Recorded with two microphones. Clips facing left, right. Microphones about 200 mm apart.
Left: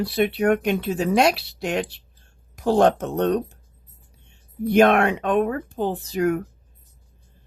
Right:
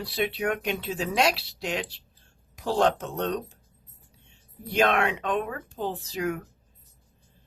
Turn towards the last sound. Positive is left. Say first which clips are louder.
# left 8 dB
turn(degrees=55)  # may be behind; listen again after turning